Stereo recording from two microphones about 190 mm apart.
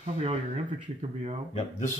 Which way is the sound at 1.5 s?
40° left (ahead or behind).